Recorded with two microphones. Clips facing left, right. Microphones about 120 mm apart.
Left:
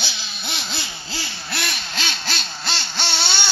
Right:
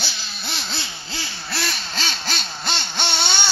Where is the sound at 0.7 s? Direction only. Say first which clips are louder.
Left 1 dB; 15° left (ahead or behind).